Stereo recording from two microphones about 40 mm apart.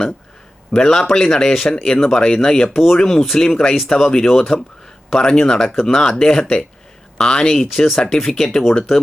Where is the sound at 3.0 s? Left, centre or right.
Centre.